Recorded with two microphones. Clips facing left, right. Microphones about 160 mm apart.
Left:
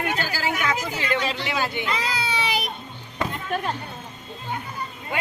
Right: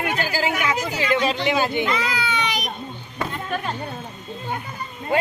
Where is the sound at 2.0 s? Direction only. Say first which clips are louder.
Right 2 dB; 35° left (ahead or behind).